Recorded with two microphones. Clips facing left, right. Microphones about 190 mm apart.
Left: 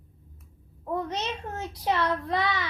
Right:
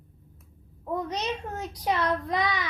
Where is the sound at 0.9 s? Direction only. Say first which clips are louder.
Even; 15° right (ahead or behind).